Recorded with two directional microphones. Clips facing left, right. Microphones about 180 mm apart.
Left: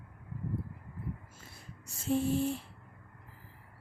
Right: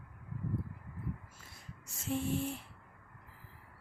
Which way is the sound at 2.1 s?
35° left (ahead or behind).